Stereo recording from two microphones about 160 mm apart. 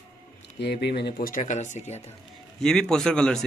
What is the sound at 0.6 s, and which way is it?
Speech, 90° left.